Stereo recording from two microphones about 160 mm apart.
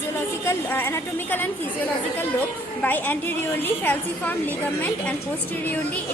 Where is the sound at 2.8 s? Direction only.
10° left (ahead or behind).